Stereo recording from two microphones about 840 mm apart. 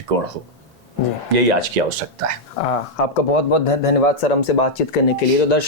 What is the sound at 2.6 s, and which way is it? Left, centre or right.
Speech, left.